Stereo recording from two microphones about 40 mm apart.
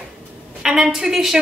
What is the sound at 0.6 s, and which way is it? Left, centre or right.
Speech, centre.